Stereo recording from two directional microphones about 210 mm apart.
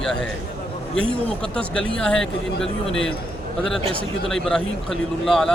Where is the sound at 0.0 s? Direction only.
5° left (ahead or behind).